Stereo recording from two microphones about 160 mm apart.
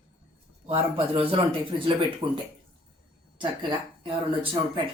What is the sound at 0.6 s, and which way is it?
Speech, 35° right (ahead or behind).